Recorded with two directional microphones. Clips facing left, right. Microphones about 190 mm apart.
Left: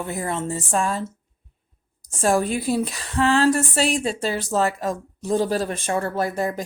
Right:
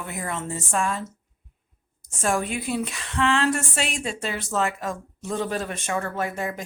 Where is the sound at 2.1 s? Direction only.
35° left (ahead or behind).